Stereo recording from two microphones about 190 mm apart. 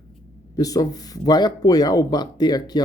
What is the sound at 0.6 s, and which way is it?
Speech, 20° left (ahead or behind).